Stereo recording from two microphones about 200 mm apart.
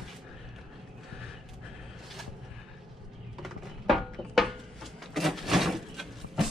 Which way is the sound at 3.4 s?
Centre (ahead or behind).